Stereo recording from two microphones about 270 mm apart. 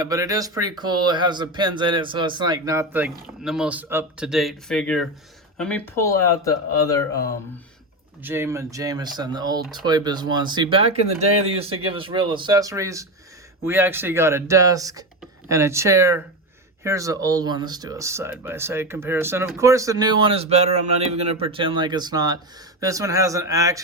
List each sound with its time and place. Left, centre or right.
0.0 s speech: centre
8.2 s speech: centre